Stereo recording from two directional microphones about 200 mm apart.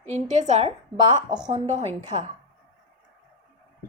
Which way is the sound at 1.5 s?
30° right (ahead or behind).